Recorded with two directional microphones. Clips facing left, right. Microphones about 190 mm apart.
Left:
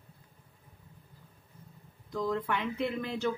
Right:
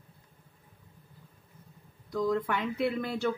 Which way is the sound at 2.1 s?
5° right (ahead or behind).